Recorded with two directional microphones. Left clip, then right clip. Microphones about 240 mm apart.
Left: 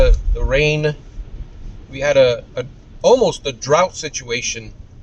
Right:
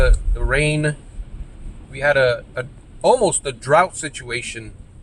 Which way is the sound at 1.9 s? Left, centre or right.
Centre.